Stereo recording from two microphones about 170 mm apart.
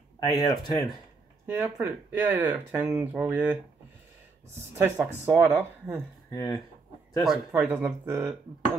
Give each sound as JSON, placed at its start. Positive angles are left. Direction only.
{"t": 0.2, "sound": "speech", "side_deg": 20}
{"t": 1.5, "sound": "speech", "side_deg": -15}
{"t": 4.8, "sound": "speech", "side_deg": -15}
{"t": 6.3, "sound": "speech", "side_deg": 20}
{"t": 7.2, "sound": "speech", "side_deg": -10}